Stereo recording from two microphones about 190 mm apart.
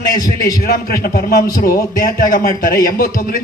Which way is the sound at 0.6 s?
50° left (ahead or behind).